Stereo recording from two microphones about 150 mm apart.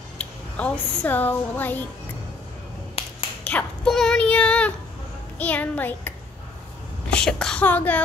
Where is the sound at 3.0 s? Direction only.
40° left (ahead or behind).